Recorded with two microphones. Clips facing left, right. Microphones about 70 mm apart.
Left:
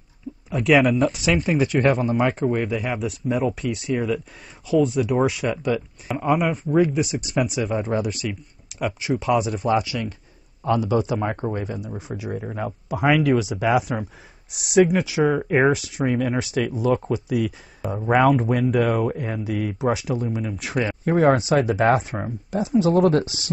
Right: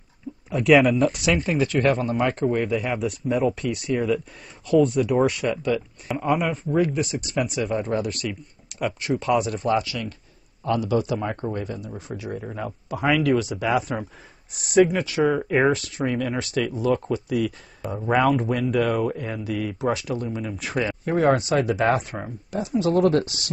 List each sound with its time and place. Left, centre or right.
0.5 s speech: centre
1.6 s speech: centre
9.8 s speech: centre
21.3 s speech: centre